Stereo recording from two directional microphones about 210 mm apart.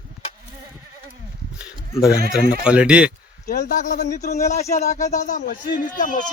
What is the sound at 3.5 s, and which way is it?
Speech, 40° left (ahead or behind).